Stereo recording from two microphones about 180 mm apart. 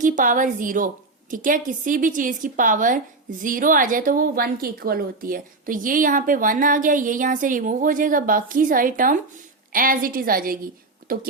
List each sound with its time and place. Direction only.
0.0 s a woman's voice: 45° right (ahead or behind)